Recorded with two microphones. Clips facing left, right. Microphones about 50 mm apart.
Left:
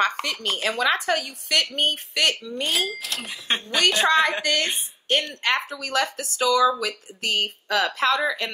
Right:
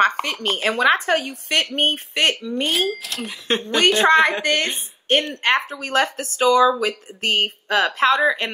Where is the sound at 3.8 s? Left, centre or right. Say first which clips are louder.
Right 4 dB; right.